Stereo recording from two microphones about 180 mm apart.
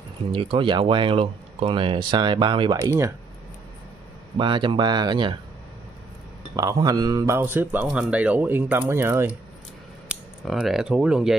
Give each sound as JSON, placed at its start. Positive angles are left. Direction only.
{"t": 0.3, "sound": "speech", "side_deg": -30}
{"t": 4.4, "sound": "speech", "side_deg": -25}
{"t": 6.5, "sound": "a man's voice", "side_deg": -20}
{"t": 10.0, "sound": "speech", "side_deg": 0}